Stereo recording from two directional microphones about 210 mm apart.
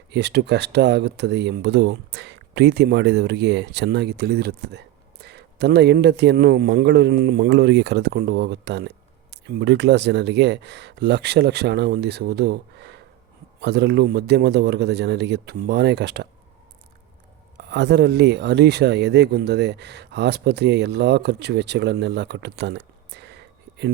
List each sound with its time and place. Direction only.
0.1 s speech: 55° right (ahead or behind)
17.6 s speech: 55° right (ahead or behind)